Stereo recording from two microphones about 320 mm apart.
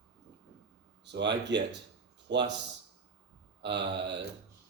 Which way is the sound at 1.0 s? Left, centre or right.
Right.